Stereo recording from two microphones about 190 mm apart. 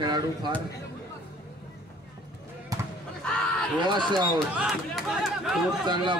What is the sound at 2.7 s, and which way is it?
Basketball bounce, 20° right (ahead or behind).